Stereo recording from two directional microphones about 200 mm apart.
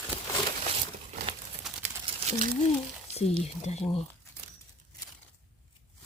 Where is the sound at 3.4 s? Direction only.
35° left (ahead or behind).